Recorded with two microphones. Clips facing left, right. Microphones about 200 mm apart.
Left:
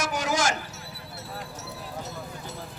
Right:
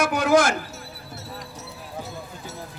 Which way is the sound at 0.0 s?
60° right (ahead or behind).